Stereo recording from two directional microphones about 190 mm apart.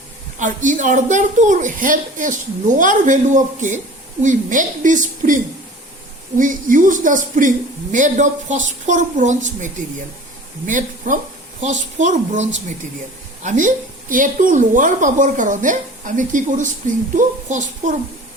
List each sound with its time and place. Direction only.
0.3 s a woman's voice: 40° right (ahead or behind)